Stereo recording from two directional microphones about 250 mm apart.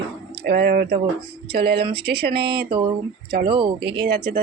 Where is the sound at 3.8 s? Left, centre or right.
Right.